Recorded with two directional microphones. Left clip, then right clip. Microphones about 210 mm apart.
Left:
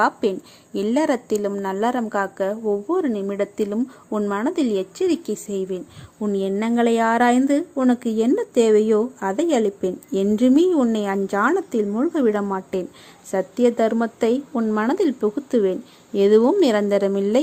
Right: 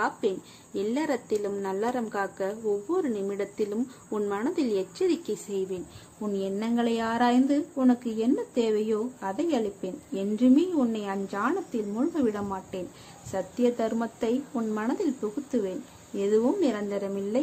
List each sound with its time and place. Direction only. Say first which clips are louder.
0.0 s a woman's voice: left 8 dB; 35° left (ahead or behind)